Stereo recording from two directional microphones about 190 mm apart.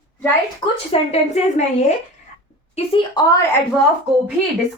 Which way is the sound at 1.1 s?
35° left (ahead or behind).